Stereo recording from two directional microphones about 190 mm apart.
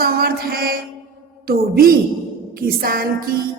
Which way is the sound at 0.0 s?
55° right (ahead or behind).